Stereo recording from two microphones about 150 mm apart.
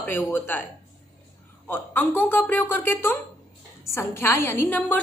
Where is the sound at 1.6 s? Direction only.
15° left (ahead or behind).